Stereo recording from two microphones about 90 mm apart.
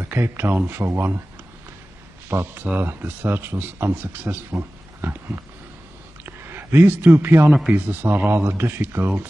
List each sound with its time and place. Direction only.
0.0 s speech: 25° right (ahead or behind)
2.2 s speech: 25° right (ahead or behind)